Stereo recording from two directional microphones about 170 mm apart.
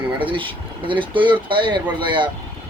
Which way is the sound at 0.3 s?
30° right (ahead or behind).